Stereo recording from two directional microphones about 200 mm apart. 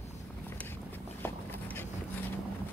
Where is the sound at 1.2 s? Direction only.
10° left (ahead or behind).